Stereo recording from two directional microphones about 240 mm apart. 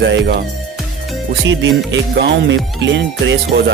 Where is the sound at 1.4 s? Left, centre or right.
Right.